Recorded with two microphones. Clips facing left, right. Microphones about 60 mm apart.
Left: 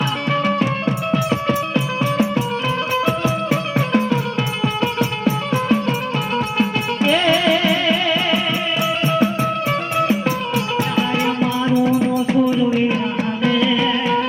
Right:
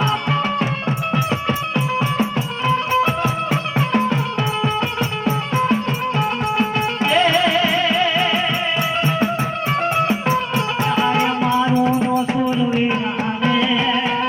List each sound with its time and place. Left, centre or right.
0.3 s music: right
10.0 s music: right